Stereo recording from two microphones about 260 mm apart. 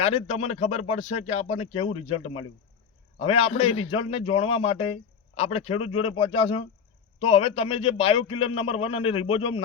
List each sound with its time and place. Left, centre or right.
0.0 s a man's voice: left